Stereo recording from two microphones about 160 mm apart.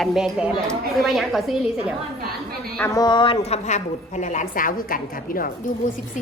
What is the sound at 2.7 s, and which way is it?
Speech, 20° left (ahead or behind).